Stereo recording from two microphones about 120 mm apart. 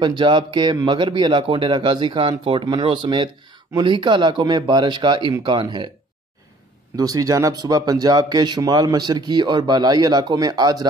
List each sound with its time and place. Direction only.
0.0 s speech: 40° right (ahead or behind)
7.0 s speech: 30° right (ahead or behind)